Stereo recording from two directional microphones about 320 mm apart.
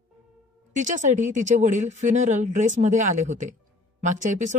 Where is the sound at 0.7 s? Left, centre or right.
Right.